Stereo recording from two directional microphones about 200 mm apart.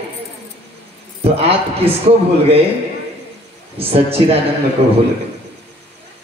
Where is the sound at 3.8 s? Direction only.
30° right (ahead or behind).